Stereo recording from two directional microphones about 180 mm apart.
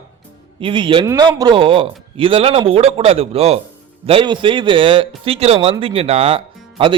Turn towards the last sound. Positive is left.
turn(degrees=-30)  # may be behind; listen again after turning